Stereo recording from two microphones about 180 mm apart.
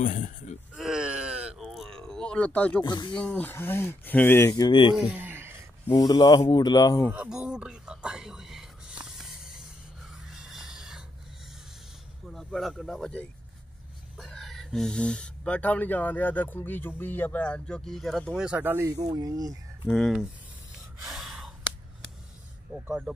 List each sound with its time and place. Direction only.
0.0 s speech: 45° left (ahead or behind)
0.7 s a sound: 5° right (ahead or behind)
2.8 s speech: 25° left (ahead or behind)
3.2 s speech: 10° left (ahead or behind); by 4.9 s 25° left (ahead or behind)
4.9 s speech: 10° right (ahead or behind)
5.9 s speech: 25° left (ahead or behind)
7.1 s speech: 5° right (ahead or behind)
9.1 s snake: centre (ahead or behind)
10.1 s a sound: 5° right (ahead or behind)
12.3 s speech: centre (ahead or behind); by 19.6 s 20° right (ahead or behind)
19.9 s speech: centre (ahead or behind)
21.1 s gasp: centre (ahead or behind)
22.8 s speech: 10° right (ahead or behind)